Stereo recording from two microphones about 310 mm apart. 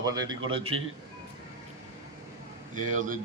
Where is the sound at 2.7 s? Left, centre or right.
Right.